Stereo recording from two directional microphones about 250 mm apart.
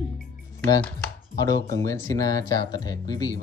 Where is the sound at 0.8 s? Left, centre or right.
Centre.